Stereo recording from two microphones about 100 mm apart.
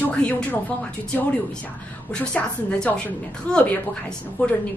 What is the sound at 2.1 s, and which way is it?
A woman's voice, 10° left (ahead or behind).